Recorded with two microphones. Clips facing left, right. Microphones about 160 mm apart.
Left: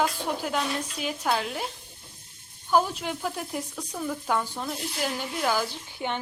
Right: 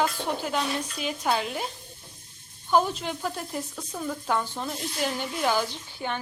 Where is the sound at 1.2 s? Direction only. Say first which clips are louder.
Right 1 dB; 5° right (ahead or behind).